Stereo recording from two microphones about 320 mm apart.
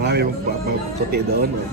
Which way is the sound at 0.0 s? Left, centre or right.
Right.